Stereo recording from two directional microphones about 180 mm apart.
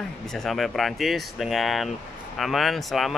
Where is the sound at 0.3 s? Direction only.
Centre (ahead or behind).